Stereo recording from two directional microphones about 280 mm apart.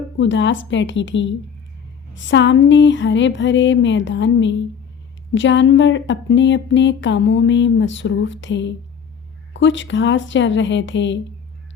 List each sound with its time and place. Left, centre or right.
0.2 s speech: left